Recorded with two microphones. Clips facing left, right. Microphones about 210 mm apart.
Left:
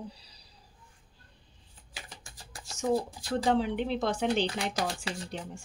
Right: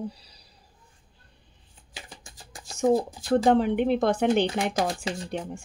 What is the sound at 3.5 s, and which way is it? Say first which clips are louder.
Speech: right 5 dB; 55° right (ahead or behind).